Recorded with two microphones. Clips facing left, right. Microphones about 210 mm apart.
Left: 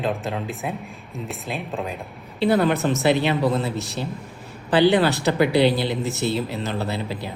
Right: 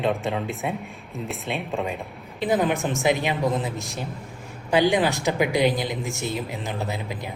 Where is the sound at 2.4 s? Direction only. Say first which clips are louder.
Left 3 dB; 15° right (ahead or behind).